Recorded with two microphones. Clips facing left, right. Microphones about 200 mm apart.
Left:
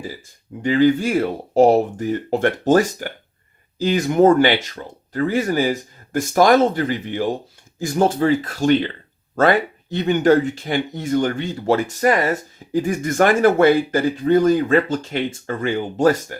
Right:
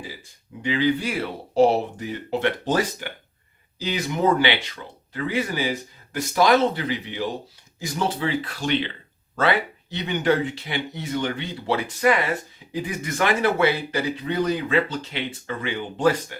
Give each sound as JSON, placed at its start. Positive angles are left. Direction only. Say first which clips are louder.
{"t": 0.6, "sound": "speech", "louder": "left 7 dB", "side_deg": 45}